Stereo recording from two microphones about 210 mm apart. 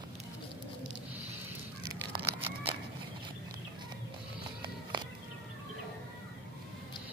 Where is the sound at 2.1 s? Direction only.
25° right (ahead or behind).